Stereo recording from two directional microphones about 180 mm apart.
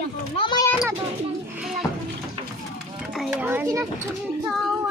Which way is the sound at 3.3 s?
10° right (ahead or behind).